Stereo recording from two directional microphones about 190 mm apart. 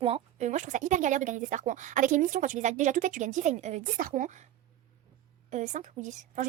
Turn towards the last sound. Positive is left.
turn(degrees=-40)  # may be behind; listen again after turning